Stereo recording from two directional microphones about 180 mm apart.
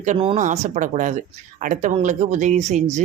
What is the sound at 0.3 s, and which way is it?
Speech, 40° right (ahead or behind).